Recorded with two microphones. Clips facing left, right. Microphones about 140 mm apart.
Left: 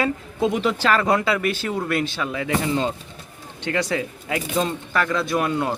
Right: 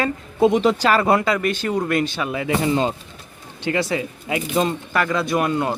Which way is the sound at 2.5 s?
20° right (ahead or behind).